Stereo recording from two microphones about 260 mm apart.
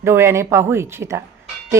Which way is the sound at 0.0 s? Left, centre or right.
Centre.